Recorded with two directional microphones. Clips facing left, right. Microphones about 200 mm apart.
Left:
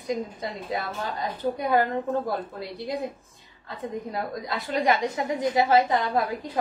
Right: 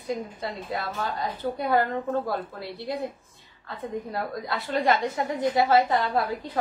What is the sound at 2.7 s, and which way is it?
Speech, 15° left (ahead or behind).